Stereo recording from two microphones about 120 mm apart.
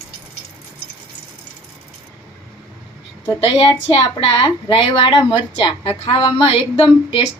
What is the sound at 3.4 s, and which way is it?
A woman's voice, 50° left (ahead or behind).